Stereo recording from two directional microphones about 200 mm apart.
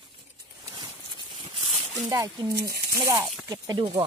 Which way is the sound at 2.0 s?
15° right (ahead or behind).